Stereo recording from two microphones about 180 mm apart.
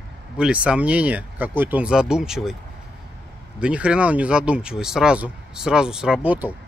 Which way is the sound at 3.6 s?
5° right (ahead or behind).